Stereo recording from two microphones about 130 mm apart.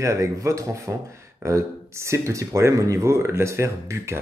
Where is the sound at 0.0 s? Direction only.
25° right (ahead or behind).